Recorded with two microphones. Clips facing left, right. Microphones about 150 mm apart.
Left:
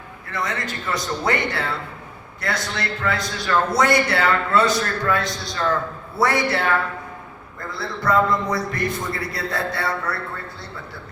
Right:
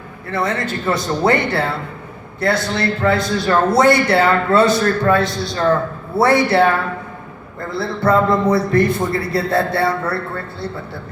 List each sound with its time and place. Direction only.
0.3 s a man's voice: 30° right (ahead or behind)
7.7 s a man's voice: 30° right (ahead or behind)